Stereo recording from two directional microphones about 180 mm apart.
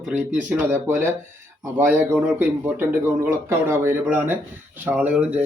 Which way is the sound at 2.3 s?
10° right (ahead or behind).